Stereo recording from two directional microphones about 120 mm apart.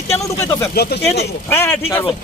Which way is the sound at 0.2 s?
25° left (ahead or behind).